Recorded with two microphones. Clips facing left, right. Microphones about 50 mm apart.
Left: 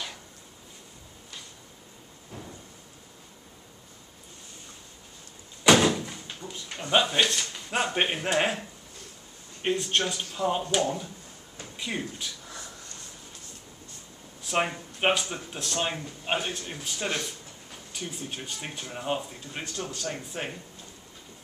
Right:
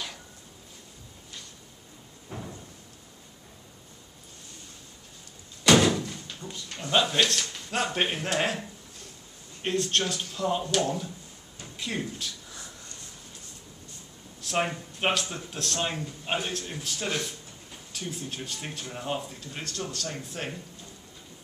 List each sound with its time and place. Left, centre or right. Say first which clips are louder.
2.3 s door: right 4 dB; right
5.6 s door: even; centre
9.6 s speech: left 1 dB; centre
11.7 s speech: even; centre
14.4 s speech: left 1 dB; centre